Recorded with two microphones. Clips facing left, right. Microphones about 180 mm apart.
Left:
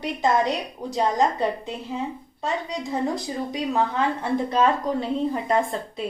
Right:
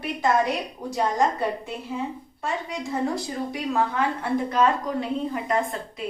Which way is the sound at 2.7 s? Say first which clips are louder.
Right 1 dB; 20° left (ahead or behind).